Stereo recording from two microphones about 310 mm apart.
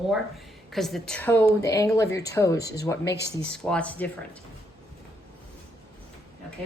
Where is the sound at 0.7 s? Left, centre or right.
Centre.